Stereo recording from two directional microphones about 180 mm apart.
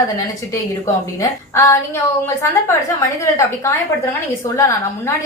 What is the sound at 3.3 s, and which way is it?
Speech, 15° left (ahead or behind).